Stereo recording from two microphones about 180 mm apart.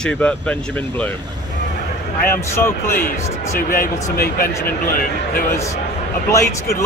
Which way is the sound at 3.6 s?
50° left (ahead or behind).